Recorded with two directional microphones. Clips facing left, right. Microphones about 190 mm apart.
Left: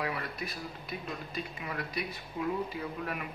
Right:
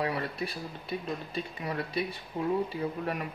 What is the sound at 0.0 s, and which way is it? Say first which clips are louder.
Speech: right 4 dB; 30° right (ahead or behind).